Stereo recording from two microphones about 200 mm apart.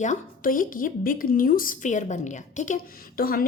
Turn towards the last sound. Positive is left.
turn(degrees=45)  # may be behind; listen again after turning